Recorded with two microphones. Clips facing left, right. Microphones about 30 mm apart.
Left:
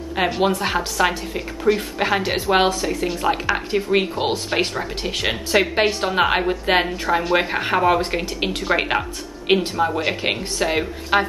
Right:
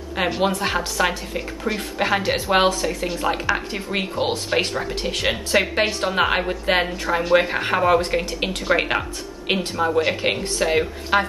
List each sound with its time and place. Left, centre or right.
0.1 s a woman's voice: centre